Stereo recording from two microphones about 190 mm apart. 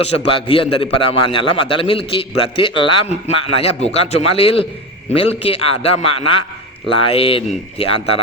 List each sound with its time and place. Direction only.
0.3 s a man's voice: 30° left (ahead or behind)